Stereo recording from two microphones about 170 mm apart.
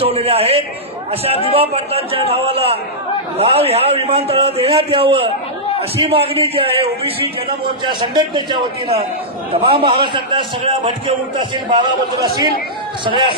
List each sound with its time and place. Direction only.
0.0 s a man's voice: 35° right (ahead or behind)